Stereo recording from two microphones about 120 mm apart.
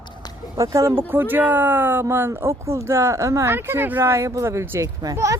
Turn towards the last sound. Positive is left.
turn(degrees=-25)  # may be behind; listen again after turning